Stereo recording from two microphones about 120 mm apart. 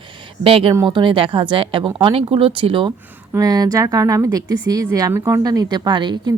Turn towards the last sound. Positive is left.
turn(degrees=-35)  # may be behind; listen again after turning